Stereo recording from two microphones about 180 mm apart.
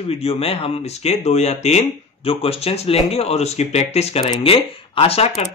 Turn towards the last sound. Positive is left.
turn(degrees=35)  # may be behind; listen again after turning